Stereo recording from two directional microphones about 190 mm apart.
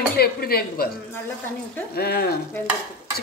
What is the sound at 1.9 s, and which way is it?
Speech, 55° left (ahead or behind).